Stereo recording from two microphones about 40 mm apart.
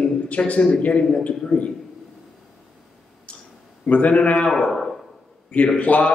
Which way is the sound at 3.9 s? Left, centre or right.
Left.